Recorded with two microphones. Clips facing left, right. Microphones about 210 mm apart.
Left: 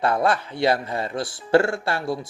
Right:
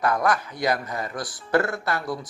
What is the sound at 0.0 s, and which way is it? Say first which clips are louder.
Speech: left 2 dB; 30° left (ahead or behind).